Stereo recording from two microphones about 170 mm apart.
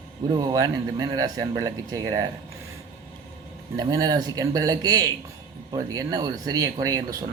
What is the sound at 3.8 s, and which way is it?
A man's voice, 20° right (ahead or behind).